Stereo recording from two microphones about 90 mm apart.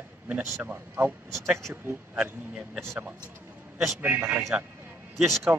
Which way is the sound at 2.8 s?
30° right (ahead or behind).